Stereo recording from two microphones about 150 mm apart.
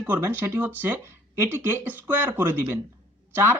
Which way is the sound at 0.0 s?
15° right (ahead or behind).